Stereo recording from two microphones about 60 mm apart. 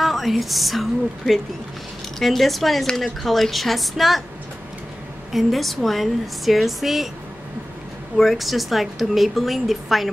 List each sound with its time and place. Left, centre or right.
0.0 s a woman's voice: centre
5.3 s a woman's voice: centre
8.2 s a woman's voice: centre